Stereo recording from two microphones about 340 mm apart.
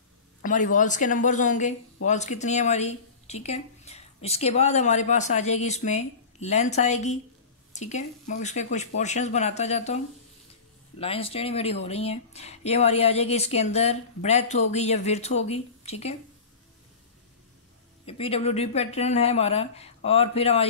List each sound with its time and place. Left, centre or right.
0.4 s speech: left
18.0 s speech: centre